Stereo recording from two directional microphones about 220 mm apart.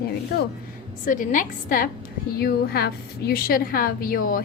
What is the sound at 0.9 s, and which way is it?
A woman's voice, 35° left (ahead or behind).